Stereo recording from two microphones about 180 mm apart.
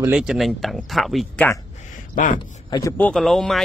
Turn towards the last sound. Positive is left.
turn(degrees=0)  # may be behind; listen again after turning